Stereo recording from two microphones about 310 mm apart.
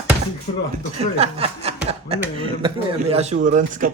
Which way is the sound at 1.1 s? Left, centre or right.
Centre.